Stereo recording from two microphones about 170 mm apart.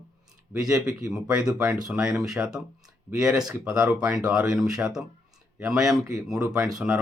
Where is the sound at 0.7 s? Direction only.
20° right (ahead or behind).